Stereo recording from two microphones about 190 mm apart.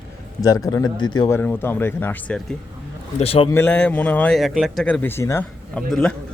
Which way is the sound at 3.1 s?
30° left (ahead or behind).